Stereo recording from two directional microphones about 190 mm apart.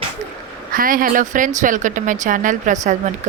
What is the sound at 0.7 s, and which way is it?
Speech, 50° right (ahead or behind).